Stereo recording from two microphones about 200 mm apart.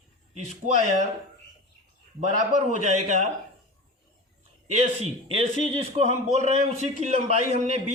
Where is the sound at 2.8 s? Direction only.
35° right (ahead or behind).